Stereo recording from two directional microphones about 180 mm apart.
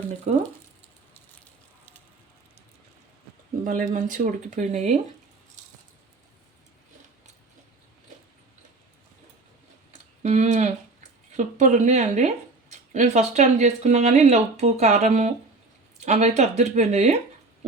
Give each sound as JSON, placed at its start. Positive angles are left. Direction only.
{"t": 0.3, "sound": "speech", "side_deg": -40}
{"t": 3.6, "sound": "speech", "side_deg": -45}
{"t": 10.2, "sound": "speech", "side_deg": -40}